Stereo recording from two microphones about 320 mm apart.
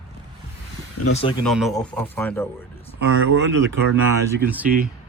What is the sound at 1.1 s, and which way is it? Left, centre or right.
Speech, centre.